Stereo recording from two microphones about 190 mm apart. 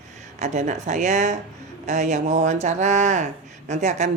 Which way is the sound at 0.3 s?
40° right (ahead or behind).